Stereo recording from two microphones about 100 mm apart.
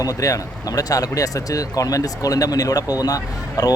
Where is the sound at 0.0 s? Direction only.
35° left (ahead or behind).